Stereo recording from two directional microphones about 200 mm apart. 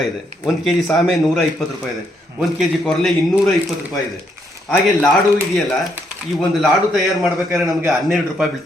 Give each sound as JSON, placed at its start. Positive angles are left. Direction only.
{"t": 0.4, "sound": "speech", "side_deg": 0}